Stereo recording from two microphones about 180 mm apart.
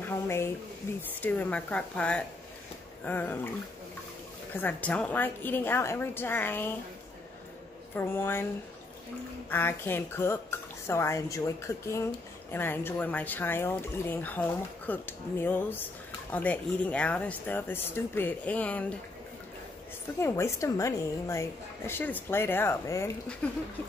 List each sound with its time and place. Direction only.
0.0 s a sound: 15° left (ahead or behind)
1.2 s speech: 10° left (ahead or behind)
4.6 s speech: 10° left (ahead or behind)
7.9 s speech: 10° left (ahead or behind)
9.5 s speech: 10° left (ahead or behind)
20.2 s speech: 15° left (ahead or behind)